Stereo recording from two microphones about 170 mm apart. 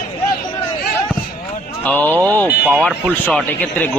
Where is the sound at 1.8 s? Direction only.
10° left (ahead or behind).